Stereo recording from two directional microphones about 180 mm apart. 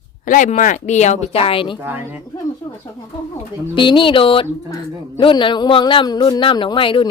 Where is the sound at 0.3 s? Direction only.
45° left (ahead or behind); by 1.8 s 30° left (ahead or behind).